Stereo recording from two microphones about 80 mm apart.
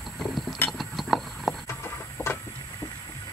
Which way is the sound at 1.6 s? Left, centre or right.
Left.